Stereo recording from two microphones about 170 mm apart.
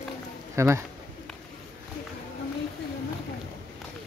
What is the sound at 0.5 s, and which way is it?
Speech, 15° right (ahead or behind).